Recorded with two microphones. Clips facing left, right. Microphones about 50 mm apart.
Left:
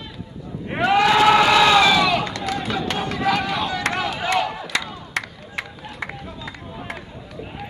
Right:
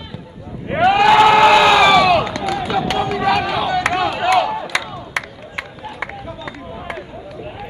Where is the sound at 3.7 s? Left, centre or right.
Right.